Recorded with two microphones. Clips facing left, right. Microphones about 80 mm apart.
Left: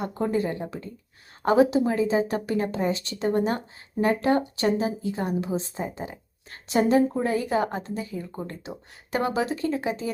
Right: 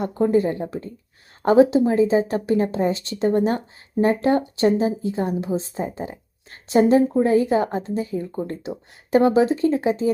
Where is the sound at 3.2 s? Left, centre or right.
Left.